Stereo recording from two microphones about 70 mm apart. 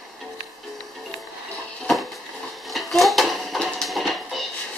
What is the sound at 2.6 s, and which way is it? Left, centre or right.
Dishes, centre.